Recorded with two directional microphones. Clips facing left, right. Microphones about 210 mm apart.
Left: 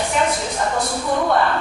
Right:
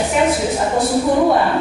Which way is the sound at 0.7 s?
20° right (ahead or behind).